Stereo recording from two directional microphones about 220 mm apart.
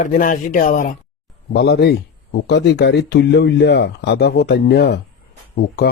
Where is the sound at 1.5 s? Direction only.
45° left (ahead or behind).